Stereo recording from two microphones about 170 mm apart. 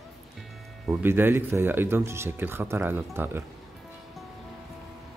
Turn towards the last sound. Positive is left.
turn(degrees=-10)  # may be behind; listen again after turning